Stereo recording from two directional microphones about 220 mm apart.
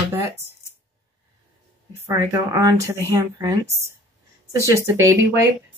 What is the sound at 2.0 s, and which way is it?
Speech, 15° right (ahead or behind).